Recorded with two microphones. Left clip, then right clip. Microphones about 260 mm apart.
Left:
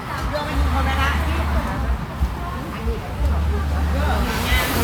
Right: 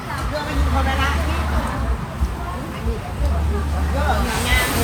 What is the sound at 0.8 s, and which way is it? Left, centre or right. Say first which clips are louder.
Speech: even; centre.